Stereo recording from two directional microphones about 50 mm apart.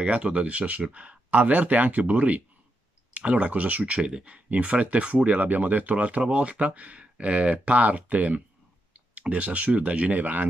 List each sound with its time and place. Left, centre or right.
0.0 s speech: right